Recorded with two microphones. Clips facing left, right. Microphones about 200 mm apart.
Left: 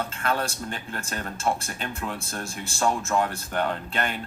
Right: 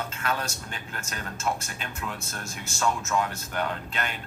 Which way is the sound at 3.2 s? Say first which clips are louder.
Left 3 dB; 50° left (ahead or behind).